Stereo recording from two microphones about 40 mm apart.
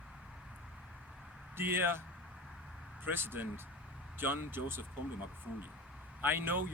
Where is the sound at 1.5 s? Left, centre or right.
Right.